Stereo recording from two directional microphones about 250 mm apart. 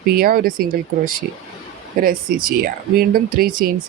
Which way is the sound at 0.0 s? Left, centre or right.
Right.